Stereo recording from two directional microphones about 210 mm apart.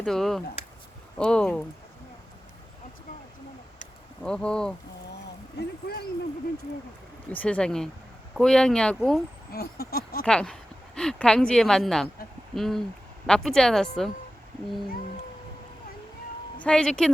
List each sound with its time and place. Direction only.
0.0 s speech: centre (ahead or behind)
4.2 s speech: 5° left (ahead or behind)
5.5 s speech: 50° left (ahead or behind)
7.3 s speech: 5° left (ahead or behind)
9.5 s speech: 45° left (ahead or behind)
10.2 s speech: 5° left (ahead or behind)
16.6 s speech: 5° left (ahead or behind)